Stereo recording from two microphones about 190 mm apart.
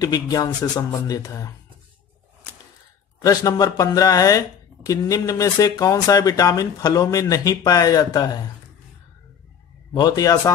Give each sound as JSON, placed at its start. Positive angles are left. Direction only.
{"t": 0.0, "sound": "speech", "side_deg": 20}
{"t": 3.3, "sound": "speech", "side_deg": 20}
{"t": 9.9, "sound": "speech", "side_deg": 20}